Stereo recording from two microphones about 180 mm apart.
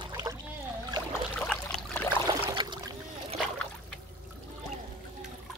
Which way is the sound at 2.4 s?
20° right (ahead or behind).